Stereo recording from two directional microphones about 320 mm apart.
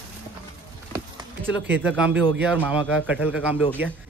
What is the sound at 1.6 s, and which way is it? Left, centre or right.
Speech, centre.